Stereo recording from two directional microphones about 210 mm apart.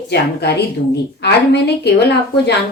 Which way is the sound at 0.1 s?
50° left (ahead or behind).